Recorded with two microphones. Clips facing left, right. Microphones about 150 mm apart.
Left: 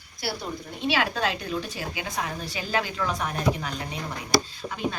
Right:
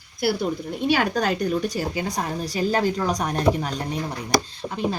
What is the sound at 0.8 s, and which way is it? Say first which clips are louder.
A woman's voice: right 4 dB; 45° right (ahead or behind).